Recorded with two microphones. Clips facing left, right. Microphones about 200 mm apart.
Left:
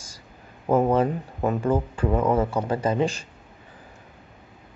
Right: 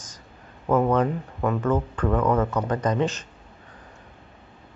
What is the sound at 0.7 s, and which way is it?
Speech, 30° left (ahead or behind).